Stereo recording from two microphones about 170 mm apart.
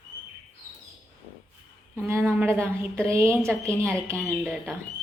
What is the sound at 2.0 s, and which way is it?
A woman's voice, 15° right (ahead or behind).